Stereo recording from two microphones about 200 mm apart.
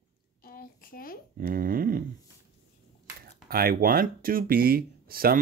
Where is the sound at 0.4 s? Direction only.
45° left (ahead or behind).